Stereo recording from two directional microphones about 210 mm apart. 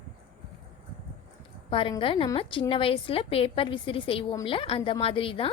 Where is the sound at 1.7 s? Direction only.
25° left (ahead or behind).